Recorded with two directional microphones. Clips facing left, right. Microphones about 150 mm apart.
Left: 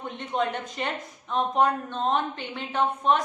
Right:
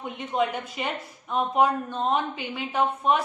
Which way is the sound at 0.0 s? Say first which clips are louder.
Right 1 dB; 5° right (ahead or behind).